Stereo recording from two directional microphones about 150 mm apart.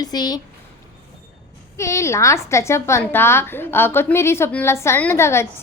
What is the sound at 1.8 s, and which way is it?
A woman's voice, 20° left (ahead or behind).